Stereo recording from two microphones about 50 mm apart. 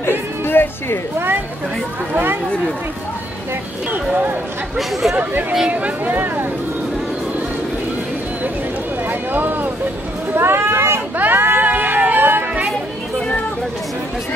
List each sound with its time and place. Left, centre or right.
0.5 s speech: left
5.7 s speech: right
6.0 s speech: right
9.1 s speech: right
10.3 s speech: right
11.1 s music: right